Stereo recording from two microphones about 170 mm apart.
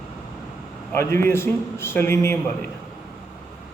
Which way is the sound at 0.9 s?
15° left (ahead or behind).